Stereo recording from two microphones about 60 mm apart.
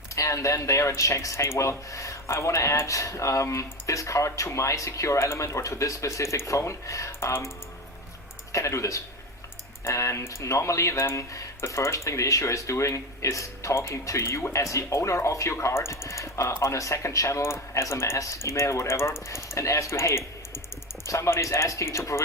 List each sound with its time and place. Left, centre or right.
0.2 s speech: left
8.5 s speech: left
16.7 s speech: left